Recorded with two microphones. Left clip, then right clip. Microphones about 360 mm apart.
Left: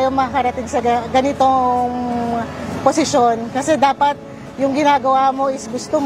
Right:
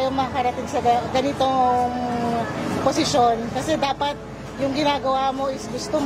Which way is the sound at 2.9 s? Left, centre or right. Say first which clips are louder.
Left 5 dB; left.